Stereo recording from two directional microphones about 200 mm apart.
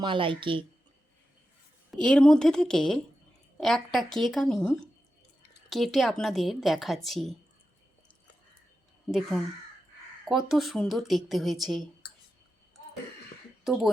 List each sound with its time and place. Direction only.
0.0 s speech: 25° right (ahead or behind)
1.9 s a woman's voice: 5° left (ahead or behind)
10.2 s a woman's voice: centre (ahead or behind)
13.7 s a woman's voice: centre (ahead or behind)